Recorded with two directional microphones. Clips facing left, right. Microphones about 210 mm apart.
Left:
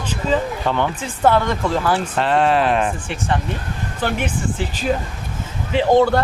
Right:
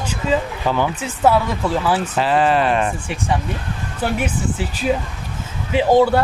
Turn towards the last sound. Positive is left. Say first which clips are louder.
# right 1 dB
turn(degrees=-5)  # may be behind; listen again after turning